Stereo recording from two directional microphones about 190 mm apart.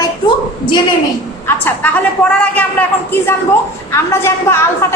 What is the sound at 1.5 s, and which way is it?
A woman's voice, 10° left (ahead or behind).